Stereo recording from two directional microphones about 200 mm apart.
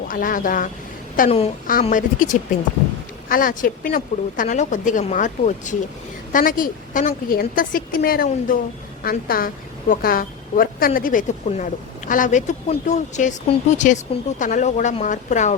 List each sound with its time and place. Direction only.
0.1 s a woman's voice: 45° left (ahead or behind)